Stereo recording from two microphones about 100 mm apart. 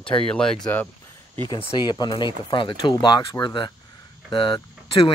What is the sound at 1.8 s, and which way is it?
Speech, 45° left (ahead or behind).